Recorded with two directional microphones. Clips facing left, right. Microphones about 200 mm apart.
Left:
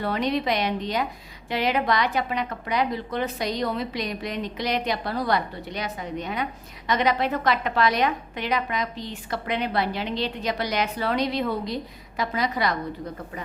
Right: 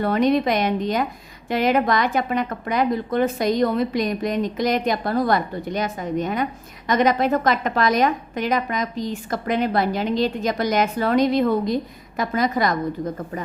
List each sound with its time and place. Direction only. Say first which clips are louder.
0.0 s a woman's voice: right 6 dB; 50° right (ahead or behind)